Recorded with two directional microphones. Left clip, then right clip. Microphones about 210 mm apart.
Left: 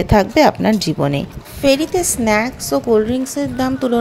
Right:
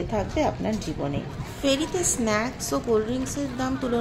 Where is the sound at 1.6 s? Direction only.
30° left (ahead or behind).